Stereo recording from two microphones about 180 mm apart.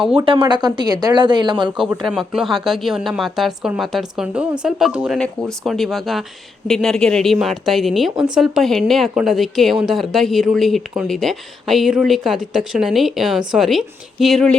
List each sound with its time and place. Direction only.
0.1 s speech: 30° right (ahead or behind)
1.7 s a woman's voice: 5° right (ahead or behind)